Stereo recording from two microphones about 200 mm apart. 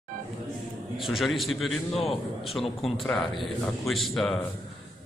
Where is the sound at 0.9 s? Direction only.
Centre (ahead or behind).